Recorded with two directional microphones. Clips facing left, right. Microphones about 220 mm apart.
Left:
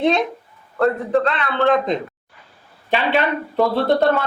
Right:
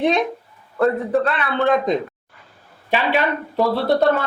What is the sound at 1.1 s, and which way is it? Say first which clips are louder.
Speech: left 2 dB; centre (ahead or behind).